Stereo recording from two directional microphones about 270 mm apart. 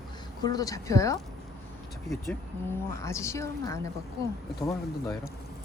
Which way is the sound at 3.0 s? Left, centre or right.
Centre.